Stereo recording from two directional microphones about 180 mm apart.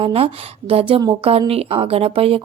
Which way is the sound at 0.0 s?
30° right (ahead or behind).